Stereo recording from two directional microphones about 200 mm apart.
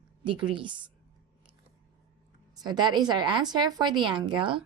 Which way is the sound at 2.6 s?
20° right (ahead or behind).